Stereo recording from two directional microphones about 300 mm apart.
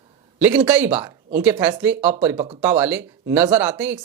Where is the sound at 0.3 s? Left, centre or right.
Centre.